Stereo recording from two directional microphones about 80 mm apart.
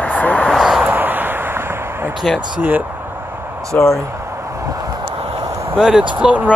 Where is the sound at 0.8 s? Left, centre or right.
Right.